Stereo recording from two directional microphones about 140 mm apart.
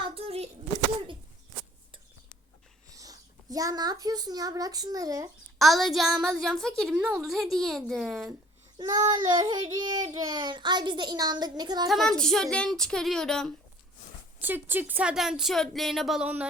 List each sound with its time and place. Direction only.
0.0 s a sound: 40° right (ahead or behind)
2.9 s a sound: 25° right (ahead or behind)
4.0 s speech: 25° right (ahead or behind)
5.5 s speech: centre (ahead or behind)
6.9 s a woman's voice: 10° right (ahead or behind)
7.2 s speech: centre (ahead or behind)
8.8 s child singing: 30° right (ahead or behind)
11.9 s speech: centre (ahead or behind)
14.4 s speech: 15° right (ahead or behind)